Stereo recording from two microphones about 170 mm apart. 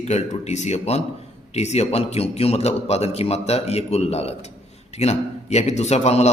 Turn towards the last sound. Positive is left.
turn(degrees=40)  # may be behind; listen again after turning